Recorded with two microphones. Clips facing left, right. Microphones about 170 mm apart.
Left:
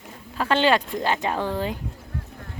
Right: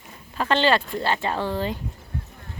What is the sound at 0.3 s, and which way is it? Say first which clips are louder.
A woman's voice: even; 5° left (ahead or behind).